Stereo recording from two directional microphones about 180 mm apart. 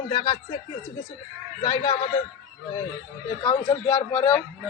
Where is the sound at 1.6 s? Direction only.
20° left (ahead or behind).